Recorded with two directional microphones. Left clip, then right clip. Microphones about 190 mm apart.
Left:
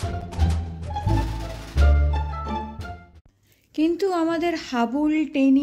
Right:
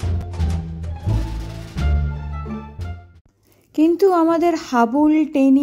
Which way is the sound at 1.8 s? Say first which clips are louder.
Left 3 dB; centre (ahead or behind).